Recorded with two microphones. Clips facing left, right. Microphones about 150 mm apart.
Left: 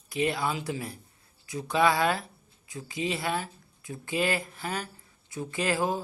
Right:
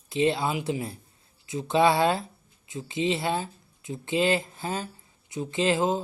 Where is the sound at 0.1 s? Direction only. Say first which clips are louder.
Right 4 dB; 25° right (ahead or behind).